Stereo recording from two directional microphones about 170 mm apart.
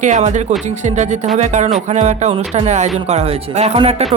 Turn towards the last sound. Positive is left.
turn(degrees=-40)  # may be behind; listen again after turning